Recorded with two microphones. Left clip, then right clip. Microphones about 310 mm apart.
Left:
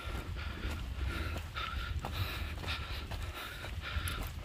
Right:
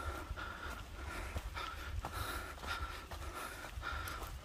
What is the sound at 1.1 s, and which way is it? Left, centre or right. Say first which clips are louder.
Snort: left 5 dB; centre.